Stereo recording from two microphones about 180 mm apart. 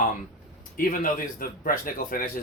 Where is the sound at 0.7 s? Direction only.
50° left (ahead or behind).